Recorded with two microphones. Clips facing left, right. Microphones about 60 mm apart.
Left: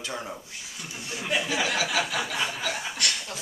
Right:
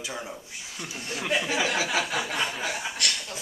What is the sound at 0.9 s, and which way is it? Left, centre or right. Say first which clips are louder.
Speech: right 2 dB; right.